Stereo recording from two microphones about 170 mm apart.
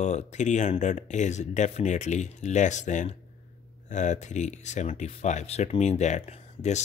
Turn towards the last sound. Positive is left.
turn(degrees=40)  # may be behind; listen again after turning